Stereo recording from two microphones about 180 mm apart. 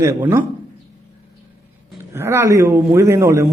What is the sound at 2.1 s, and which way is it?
A man's voice, 15° right (ahead or behind).